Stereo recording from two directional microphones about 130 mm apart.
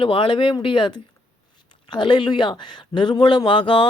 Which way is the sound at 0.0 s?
40° left (ahead or behind).